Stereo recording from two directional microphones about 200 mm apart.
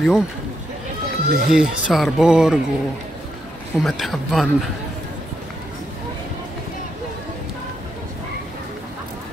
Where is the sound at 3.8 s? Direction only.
Centre (ahead or behind).